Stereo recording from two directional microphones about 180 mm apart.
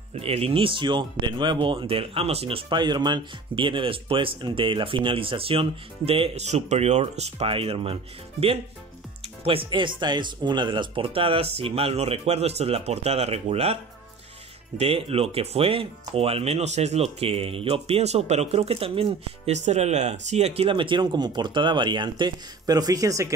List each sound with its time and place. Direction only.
0.1 s speech: 35° right (ahead or behind)
14.8 s speech: 30° right (ahead or behind)